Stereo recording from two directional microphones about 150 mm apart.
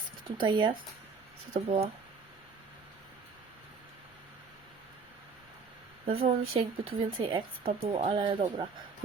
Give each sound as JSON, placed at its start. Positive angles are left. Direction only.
{"t": 0.3, "sound": "a woman's voice", "side_deg": -30}
{"t": 1.5, "sound": "speech", "side_deg": -45}
{"t": 6.1, "sound": "a woman's voice", "side_deg": -40}